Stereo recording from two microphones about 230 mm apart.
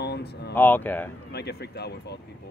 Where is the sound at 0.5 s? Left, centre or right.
Centre.